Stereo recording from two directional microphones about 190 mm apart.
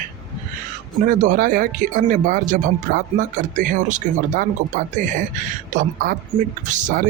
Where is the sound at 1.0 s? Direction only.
45° right (ahead or behind).